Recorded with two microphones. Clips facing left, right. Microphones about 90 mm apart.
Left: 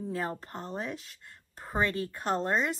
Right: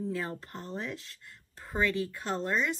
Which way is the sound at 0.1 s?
30° left (ahead or behind).